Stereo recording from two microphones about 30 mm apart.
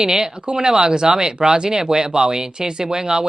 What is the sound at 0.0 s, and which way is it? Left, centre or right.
Speech, right.